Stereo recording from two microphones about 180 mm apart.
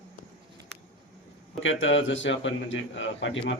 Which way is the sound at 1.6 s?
90° left.